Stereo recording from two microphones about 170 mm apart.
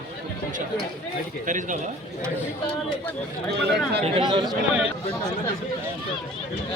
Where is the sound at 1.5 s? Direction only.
50° right (ahead or behind).